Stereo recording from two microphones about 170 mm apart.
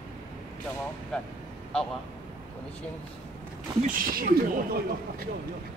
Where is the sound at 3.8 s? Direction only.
55° right (ahead or behind).